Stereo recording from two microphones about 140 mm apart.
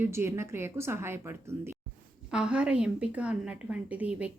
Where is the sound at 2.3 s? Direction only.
5° right (ahead or behind).